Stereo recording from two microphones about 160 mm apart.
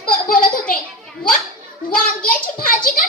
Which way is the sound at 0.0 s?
60° left (ahead or behind).